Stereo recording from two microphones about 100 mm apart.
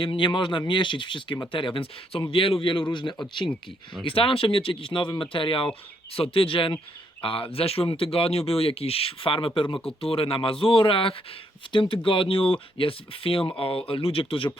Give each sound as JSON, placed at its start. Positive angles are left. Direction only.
{"t": 0.0, "sound": "speech", "side_deg": 55}
{"t": 4.0, "sound": "speech", "side_deg": 65}